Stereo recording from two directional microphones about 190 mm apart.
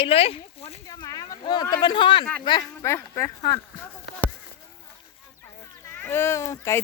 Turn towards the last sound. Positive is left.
turn(degrees=15)  # may be behind; listen again after turning